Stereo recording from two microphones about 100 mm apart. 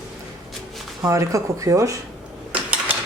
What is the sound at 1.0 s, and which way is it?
Speech, 30° right (ahead or behind).